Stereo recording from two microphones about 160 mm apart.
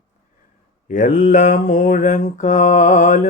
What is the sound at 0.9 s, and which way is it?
Mantra, 55° left (ahead or behind).